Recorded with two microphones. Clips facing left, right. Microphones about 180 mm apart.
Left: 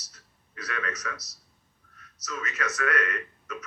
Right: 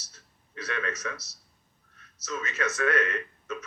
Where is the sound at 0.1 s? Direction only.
25° right (ahead or behind).